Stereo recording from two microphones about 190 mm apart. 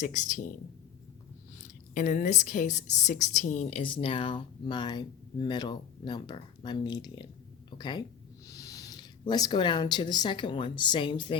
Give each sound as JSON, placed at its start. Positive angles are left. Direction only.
{"t": 0.0, "sound": "speech", "side_deg": 40}
{"t": 1.6, "sound": "a woman's voice", "side_deg": 45}